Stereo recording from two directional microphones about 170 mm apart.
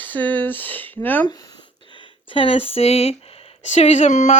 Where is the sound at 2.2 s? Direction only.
30° left (ahead or behind).